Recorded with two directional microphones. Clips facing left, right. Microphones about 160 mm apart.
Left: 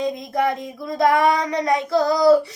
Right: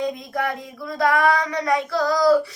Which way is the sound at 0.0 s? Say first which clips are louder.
Left 3 dB; 20° left (ahead or behind).